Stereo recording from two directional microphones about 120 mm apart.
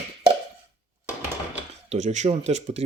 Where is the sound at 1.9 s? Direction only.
80° right.